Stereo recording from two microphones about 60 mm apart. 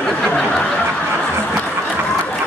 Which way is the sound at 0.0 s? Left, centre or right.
Centre.